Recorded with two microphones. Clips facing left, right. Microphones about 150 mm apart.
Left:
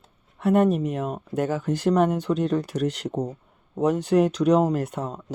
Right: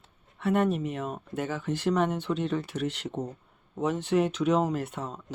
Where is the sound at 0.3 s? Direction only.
45° left (ahead or behind).